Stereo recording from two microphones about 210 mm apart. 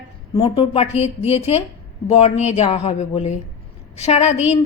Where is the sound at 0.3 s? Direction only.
25° left (ahead or behind).